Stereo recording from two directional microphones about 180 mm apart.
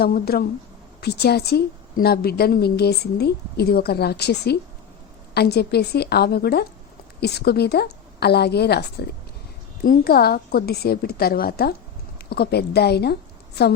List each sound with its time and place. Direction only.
0.0 s a woman's voice: 55° left (ahead or behind)
9.8 s a woman's voice: 55° left (ahead or behind)